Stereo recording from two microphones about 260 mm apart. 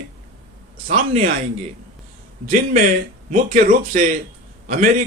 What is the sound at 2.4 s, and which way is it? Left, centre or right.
Speech, right.